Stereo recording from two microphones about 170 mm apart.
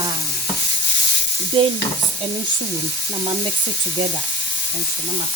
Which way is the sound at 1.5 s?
30° right (ahead or behind).